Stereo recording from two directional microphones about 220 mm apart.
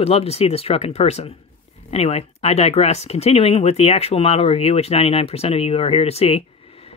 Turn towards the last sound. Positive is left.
turn(degrees=30)  # may be behind; listen again after turning